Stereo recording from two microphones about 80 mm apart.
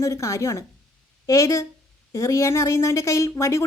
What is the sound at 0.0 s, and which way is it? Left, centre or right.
A woman's voice, left.